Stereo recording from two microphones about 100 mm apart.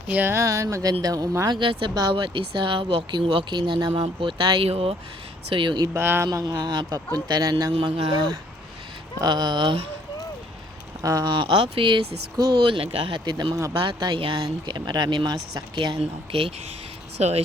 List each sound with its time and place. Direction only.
0.1 s a man's voice: 20° right (ahead or behind)
1.5 s speech: 55° right (ahead or behind); by 4.9 s 75° right (ahead or behind)
5.5 s speech: 55° right (ahead or behind)
5.8 s speech: 25° right (ahead or behind)
6.3 s a man's voice: 40° right (ahead or behind)
7.8 s speech: 65° right (ahead or behind)
9.2 s speech: 50° right (ahead or behind)
11.0 s speech: 35° right (ahead or behind)
11.3 s speech: 60° right (ahead or behind)
13.3 s a man's voice: 40° right (ahead or behind)
13.7 s speech: 50° right (ahead or behind)
14.7 s speech: 50° right (ahead or behind)
16.0 s speech: 75° right (ahead or behind)
17.2 s speech: 90° right